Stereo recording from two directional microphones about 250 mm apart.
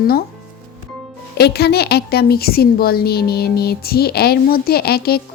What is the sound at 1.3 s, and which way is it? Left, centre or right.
A woman's voice, left.